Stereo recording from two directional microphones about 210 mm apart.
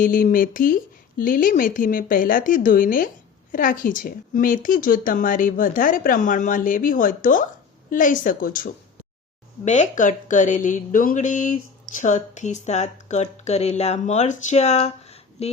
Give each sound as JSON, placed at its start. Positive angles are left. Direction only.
{"t": 0.0, "sound": "a woman's voice", "side_deg": 40}